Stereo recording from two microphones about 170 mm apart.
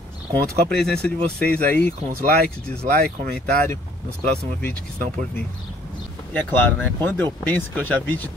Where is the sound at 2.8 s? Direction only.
60° right (ahead or behind).